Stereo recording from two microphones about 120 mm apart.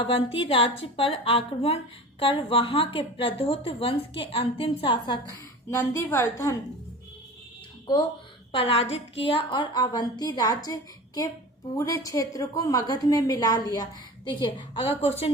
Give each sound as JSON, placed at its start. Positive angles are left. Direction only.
{"t": 0.0, "sound": "a woman's voice", "side_deg": 50}
{"t": 5.7, "sound": "a woman's voice", "side_deg": 20}
{"t": 8.5, "sound": "a woman's voice", "side_deg": 50}